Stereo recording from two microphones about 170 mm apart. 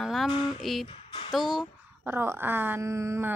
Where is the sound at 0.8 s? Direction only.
30° left (ahead or behind).